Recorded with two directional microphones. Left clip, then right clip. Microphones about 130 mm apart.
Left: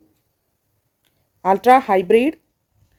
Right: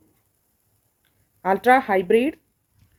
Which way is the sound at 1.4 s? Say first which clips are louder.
Left 4 dB; 40° left (ahead or behind).